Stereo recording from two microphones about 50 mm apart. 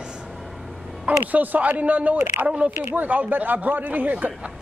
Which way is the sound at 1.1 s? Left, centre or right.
Right.